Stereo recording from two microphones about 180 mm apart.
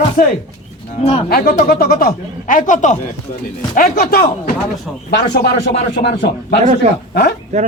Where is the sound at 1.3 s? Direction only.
55° left (ahead or behind).